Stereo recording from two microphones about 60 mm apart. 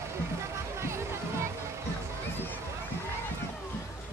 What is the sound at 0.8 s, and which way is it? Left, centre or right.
Music, right.